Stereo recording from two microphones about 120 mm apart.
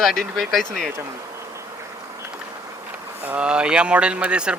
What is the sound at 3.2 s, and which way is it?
Speech, 10° right (ahead or behind).